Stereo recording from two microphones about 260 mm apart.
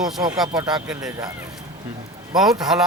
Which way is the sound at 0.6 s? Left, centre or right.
Centre.